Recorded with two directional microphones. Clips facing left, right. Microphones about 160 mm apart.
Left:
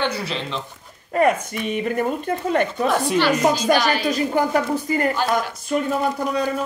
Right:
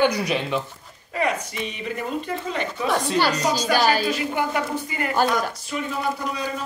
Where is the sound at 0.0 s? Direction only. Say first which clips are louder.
Right 4 dB; 15° right (ahead or behind).